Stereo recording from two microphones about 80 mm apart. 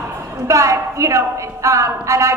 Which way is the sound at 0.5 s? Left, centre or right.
Right.